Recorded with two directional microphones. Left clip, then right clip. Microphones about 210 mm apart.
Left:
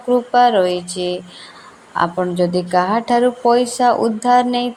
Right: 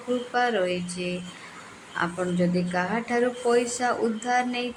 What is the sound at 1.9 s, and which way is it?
Mantra, 25° left (ahead or behind).